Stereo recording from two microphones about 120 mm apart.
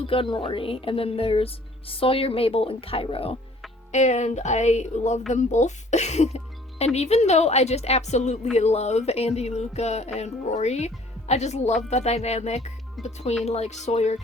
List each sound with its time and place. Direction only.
0.0 s a woman's voice: 50° left (ahead or behind)
3.9 s music: 75° left (ahead or behind)